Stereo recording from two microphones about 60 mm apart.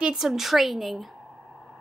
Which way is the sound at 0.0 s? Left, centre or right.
Centre.